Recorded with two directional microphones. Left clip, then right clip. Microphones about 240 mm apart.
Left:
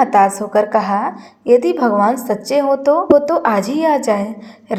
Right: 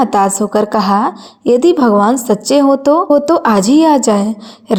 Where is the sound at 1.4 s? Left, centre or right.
Right.